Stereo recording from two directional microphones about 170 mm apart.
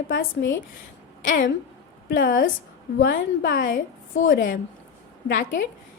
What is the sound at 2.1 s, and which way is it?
A woman's voice, 55° left (ahead or behind).